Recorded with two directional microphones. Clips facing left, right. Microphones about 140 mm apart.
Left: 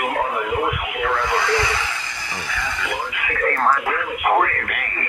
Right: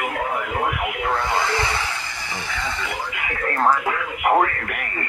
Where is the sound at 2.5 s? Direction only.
30° right (ahead or behind).